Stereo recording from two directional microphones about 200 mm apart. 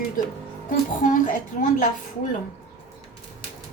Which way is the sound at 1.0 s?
40° left (ahead or behind).